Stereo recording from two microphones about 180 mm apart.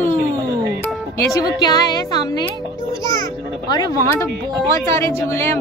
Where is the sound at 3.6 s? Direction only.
20° left (ahead or behind).